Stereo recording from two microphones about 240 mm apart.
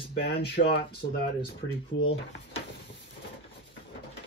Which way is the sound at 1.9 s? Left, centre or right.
Left.